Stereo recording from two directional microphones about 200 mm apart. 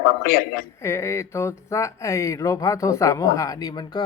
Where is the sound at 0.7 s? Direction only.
15° left (ahead or behind).